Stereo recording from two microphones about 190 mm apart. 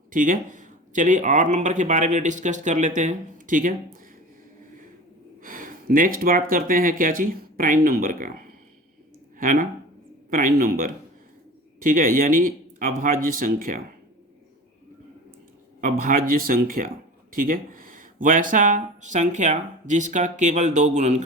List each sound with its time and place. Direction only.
0.1 s speech: 45° right (ahead or behind)
5.4 s speech: 45° right (ahead or behind)
15.8 s speech: 45° right (ahead or behind)